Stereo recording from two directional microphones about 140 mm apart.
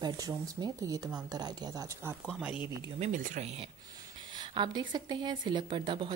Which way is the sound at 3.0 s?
70° right (ahead or behind).